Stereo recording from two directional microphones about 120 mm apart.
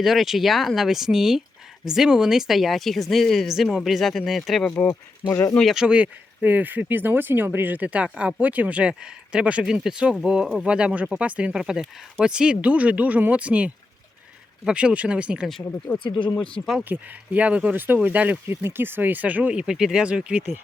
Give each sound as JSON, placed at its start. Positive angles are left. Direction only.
{"t": 0.0, "sound": "speech", "side_deg": 0}
{"t": 4.7, "sound": "speech", "side_deg": 15}
{"t": 5.3, "sound": "speech", "side_deg": 25}
{"t": 5.5, "sound": "speech", "side_deg": -5}
{"t": 16.0, "sound": "speech", "side_deg": 45}
{"t": 16.3, "sound": "speech", "side_deg": 10}
{"t": 16.9, "sound": "speech", "side_deg": -15}